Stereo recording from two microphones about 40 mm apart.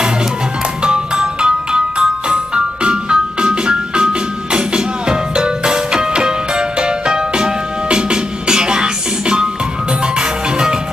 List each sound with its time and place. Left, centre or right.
0.8 s music: centre